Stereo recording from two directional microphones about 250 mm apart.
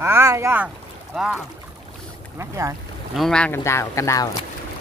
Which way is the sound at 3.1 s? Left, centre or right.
Centre.